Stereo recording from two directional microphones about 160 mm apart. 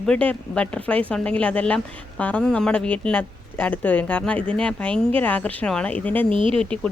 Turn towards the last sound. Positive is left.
turn(degrees=-35)  # may be behind; listen again after turning